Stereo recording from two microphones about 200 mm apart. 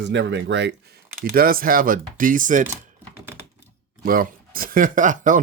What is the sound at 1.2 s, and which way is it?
Speech, 50° right (ahead or behind).